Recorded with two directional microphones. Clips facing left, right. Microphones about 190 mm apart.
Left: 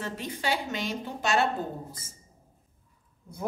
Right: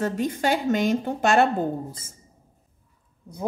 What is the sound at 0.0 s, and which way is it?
A woman's voice, 45° right (ahead or behind).